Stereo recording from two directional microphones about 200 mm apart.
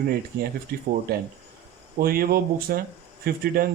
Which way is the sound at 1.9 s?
45° right (ahead or behind).